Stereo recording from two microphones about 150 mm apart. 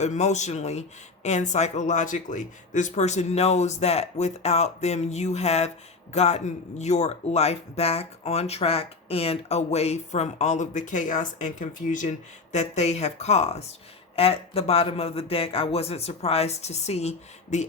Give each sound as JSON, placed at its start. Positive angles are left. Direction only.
{"t": 0.0, "sound": "speech", "side_deg": 50}